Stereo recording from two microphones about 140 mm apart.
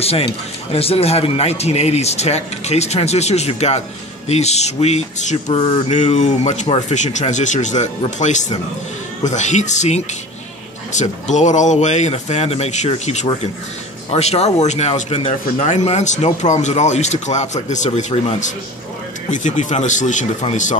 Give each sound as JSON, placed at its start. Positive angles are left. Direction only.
{"t": 0.0, "sound": "speech", "side_deg": 45}
{"t": 5.9, "sound": "speech", "side_deg": 55}